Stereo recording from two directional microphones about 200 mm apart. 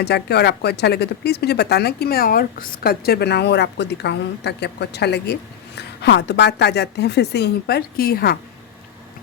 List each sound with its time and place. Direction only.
0.0 s speech: 55° left (ahead or behind)